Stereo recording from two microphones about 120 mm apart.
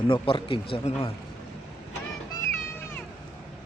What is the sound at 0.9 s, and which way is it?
Speech, 55° left (ahead or behind).